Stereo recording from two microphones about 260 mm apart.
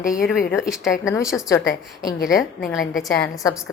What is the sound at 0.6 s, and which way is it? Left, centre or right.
Speech, centre.